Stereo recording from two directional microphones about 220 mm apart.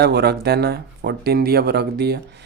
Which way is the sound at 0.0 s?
45° right (ahead or behind).